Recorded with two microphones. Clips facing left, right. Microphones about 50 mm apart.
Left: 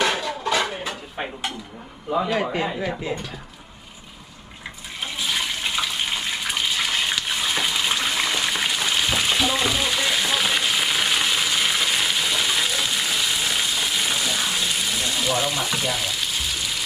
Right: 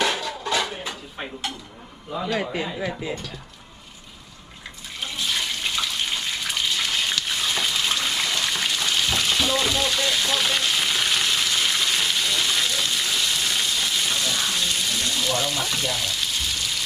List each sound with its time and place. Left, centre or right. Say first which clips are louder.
0.1 s dishes: left 2 dB; centre
2.1 s a man's voice: left 3 dB; centre
4.9 s water tap: left 1 dB; centre